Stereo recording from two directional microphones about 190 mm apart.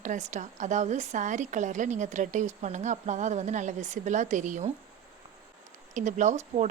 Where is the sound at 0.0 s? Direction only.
40° right (ahead or behind).